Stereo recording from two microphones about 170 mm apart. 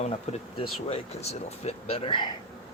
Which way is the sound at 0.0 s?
40° left (ahead or behind).